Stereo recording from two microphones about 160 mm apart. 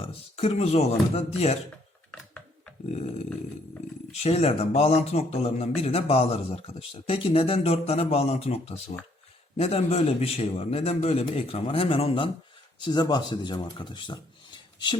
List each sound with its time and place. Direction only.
0.0 s speech: 40° left (ahead or behind)
2.9 s snoring: 45° left (ahead or behind)
4.2 s a man's voice: 40° left (ahead or behind)